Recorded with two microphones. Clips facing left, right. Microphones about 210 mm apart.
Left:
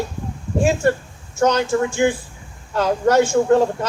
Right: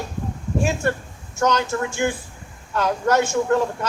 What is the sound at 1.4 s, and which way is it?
A man's voice, 30° left (ahead or behind).